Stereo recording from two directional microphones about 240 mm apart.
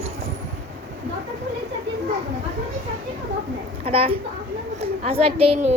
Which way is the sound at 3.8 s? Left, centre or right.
Right.